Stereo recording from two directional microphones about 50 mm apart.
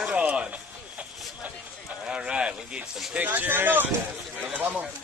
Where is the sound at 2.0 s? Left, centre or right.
Centre.